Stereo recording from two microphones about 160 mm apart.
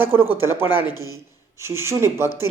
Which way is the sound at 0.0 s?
15° right (ahead or behind).